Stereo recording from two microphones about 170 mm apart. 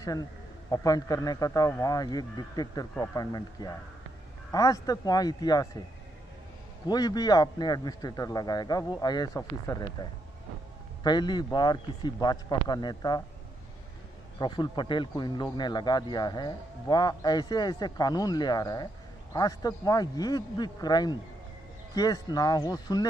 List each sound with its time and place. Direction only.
0.7 s speech: 20° left (ahead or behind)
6.9 s speech: 25° left (ahead or behind)
11.1 s speech: 25° left (ahead or behind)
14.4 s speech: 25° left (ahead or behind)